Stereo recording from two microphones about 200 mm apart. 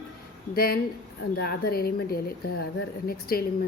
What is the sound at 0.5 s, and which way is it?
A woman's voice, 50° left (ahead or behind).